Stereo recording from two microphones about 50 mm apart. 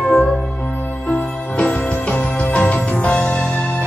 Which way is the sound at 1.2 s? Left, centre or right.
Left.